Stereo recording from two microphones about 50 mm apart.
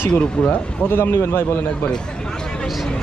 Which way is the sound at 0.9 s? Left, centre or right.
Left.